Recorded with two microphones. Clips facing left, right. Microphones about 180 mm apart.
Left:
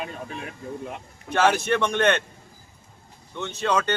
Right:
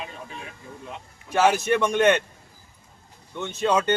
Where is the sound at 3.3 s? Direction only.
10° right (ahead or behind).